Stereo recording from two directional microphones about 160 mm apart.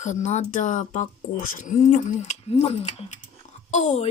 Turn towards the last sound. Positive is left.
turn(degrees=45)  # may be behind; listen again after turning